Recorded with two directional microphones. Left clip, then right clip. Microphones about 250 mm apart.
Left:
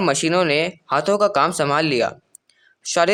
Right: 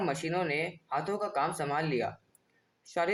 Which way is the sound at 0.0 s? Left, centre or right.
Left.